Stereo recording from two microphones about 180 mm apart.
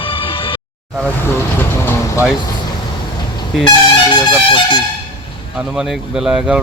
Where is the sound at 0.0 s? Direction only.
30° left (ahead or behind).